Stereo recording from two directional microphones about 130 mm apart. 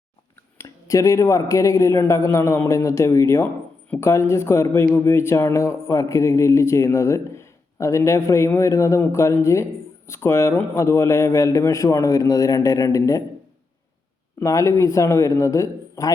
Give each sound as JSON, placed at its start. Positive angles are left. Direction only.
{"t": 0.3, "sound": "speech", "side_deg": 20}
{"t": 14.3, "sound": "speech", "side_deg": 25}